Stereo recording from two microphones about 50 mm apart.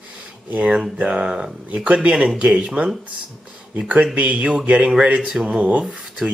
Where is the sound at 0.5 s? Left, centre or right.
Right.